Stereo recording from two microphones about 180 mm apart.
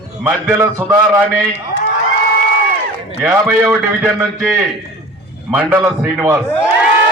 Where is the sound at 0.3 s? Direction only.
10° right (ahead or behind).